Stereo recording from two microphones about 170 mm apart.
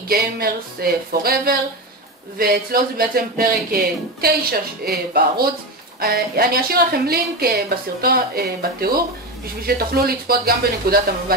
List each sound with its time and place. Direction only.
0.1 s a woman's voice: 65° right (ahead or behind)